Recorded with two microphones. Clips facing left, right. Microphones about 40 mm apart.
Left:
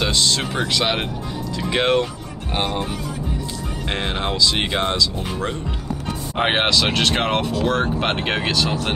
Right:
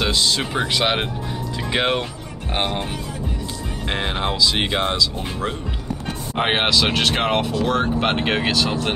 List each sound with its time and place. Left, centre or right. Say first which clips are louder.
0.0 s speech: even; centre
2.5 s speech: even; right
3.9 s speech: right 1 dB; centre